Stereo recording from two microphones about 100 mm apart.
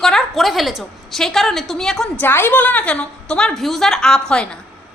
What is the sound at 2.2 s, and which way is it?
A woman's voice, 20° left (ahead or behind).